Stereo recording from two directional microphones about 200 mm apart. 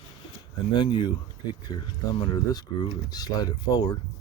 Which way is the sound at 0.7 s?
20° left (ahead or behind).